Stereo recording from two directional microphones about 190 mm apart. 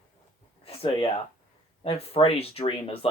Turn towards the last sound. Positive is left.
turn(degrees=30)  # may be behind; listen again after turning